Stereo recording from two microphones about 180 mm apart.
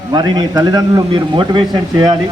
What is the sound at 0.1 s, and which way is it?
Speech, 25° right (ahead or behind).